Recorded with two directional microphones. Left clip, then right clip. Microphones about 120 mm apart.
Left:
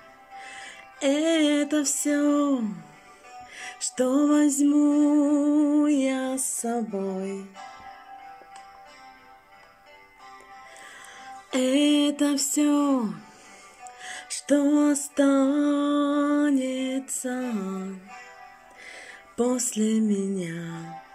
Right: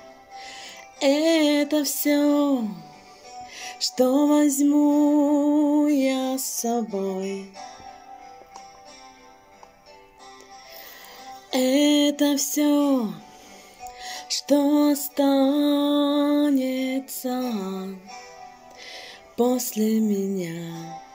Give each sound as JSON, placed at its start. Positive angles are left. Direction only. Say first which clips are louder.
{"t": 0.5, "sound": "music", "louder": "right 1 dB", "side_deg": 10}
{"t": 4.8, "sound": "music", "louder": "right 2 dB", "side_deg": -25}
{"t": 5.5, "sound": "music", "louder": "right 2 dB", "side_deg": 0}
{"t": 5.8, "sound": "music", "louder": "right 2 dB", "side_deg": 15}
{"t": 11.5, "sound": "music", "louder": "right 2 dB", "side_deg": 15}
{"t": 17.6, "sound": "music", "louder": "right 2 dB", "side_deg": 55}
{"t": 18.9, "sound": "music", "louder": "right 3 dB", "side_deg": 10}